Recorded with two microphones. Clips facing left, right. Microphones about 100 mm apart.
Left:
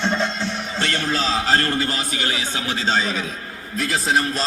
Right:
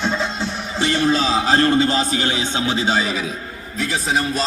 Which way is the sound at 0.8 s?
20° right (ahead or behind).